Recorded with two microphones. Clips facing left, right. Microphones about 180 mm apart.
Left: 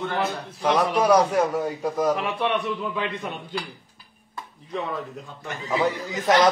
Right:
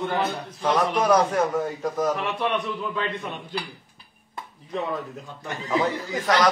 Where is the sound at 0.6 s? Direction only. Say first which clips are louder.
Left 1 dB; 10° left (ahead or behind).